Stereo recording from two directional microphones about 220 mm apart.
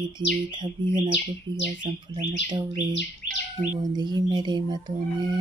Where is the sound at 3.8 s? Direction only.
20° right (ahead or behind).